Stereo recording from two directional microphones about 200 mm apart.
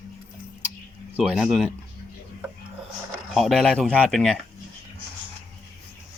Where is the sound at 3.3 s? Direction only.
Centre (ahead or behind).